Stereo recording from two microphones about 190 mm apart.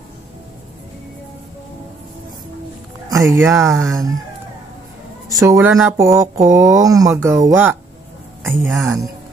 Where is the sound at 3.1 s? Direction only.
15° right (ahead or behind).